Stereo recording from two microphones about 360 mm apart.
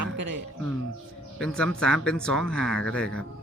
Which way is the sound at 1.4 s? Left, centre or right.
Centre.